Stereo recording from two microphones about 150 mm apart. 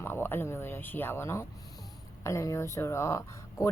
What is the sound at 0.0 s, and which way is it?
A woman's voice, 15° left (ahead or behind).